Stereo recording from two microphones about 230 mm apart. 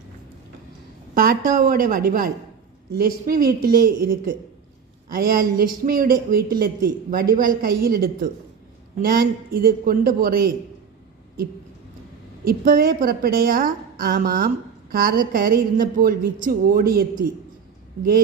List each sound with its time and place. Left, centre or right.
1.1 s a woman's voice: right
12.5 s a woman's voice: right